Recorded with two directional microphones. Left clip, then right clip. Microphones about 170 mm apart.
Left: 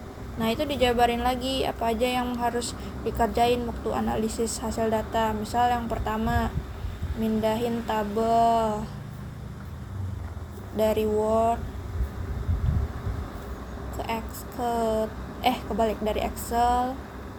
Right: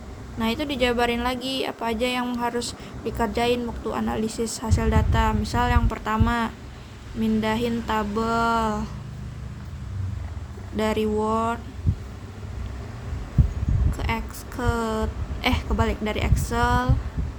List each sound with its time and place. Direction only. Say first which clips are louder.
0.3 s speech: even; 35° right (ahead or behind)
10.8 s speech: even; 35° right (ahead or behind)
14.0 s a sound: right 2 dB; 35° right (ahead or behind)
14.6 s speech: left 1 dB; 35° right (ahead or behind)